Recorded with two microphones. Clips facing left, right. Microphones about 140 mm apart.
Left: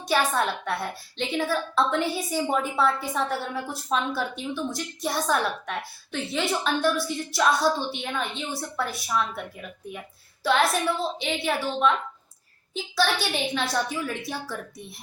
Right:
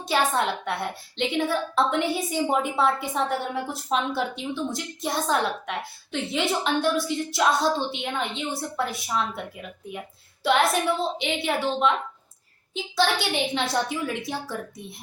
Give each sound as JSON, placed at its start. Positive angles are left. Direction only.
{"t": 0.1, "sound": "a woman's voice", "side_deg": -20}
{"t": 10.4, "sound": "a woman's voice", "side_deg": -20}